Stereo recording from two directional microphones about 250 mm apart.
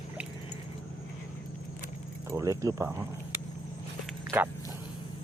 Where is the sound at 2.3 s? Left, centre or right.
Centre.